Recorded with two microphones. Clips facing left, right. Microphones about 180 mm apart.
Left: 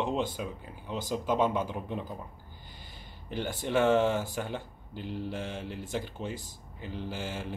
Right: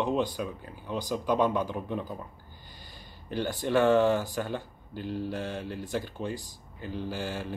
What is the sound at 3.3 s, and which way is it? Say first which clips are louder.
Speech: right 3 dB; 20° left (ahead or behind).